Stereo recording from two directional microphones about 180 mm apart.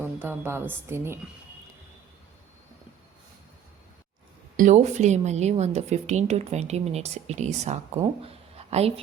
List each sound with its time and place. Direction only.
0.0 s a woman's voice: 10° right (ahead or behind)
4.5 s a woman's voice: 40° right (ahead or behind)
8.2 s a sound: 35° right (ahead or behind)